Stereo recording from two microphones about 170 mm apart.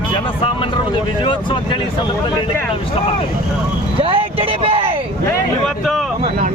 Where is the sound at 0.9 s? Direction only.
30° left (ahead or behind).